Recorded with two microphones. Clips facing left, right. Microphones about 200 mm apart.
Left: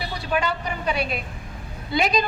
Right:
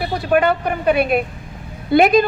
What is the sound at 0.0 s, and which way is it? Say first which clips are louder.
A woman's voice: right 9 dB; 55° right (ahead or behind).